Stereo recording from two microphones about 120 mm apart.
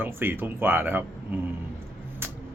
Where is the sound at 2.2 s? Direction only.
20° right (ahead or behind).